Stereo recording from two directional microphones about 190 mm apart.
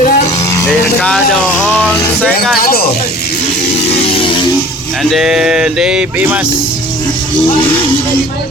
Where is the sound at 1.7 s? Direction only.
10° left (ahead or behind).